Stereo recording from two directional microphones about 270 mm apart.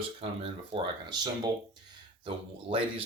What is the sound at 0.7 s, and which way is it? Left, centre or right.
Speech, centre.